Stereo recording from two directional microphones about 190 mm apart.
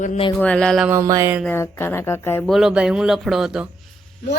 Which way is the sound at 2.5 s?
5° right (ahead or behind).